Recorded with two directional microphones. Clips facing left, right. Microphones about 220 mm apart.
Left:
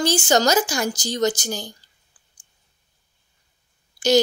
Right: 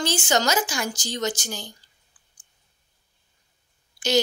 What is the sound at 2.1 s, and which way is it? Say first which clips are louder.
Clicking: left 2 dB; 35° left (ahead or behind).